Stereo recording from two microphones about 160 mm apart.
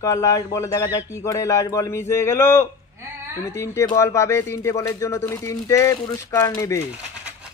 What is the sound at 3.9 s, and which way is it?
Speech, 20° left (ahead or behind).